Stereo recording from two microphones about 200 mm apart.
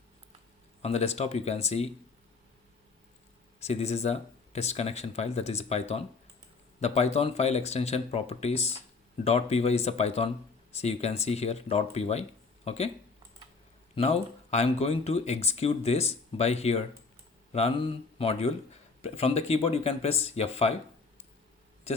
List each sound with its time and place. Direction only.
0.8 s speech: 30° left (ahead or behind)
3.6 s speech: 30° left (ahead or behind)
13.9 s speech: 30° left (ahead or behind)
21.9 s speech: 30° left (ahead or behind)